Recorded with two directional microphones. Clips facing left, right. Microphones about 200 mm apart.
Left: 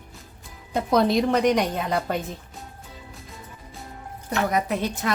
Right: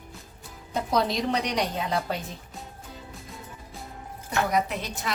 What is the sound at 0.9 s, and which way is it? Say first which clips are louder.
A woman's voice: left 6 dB; 50° left (ahead or behind).